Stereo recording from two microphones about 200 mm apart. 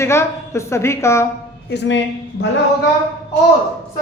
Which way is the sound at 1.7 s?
60° left (ahead or behind).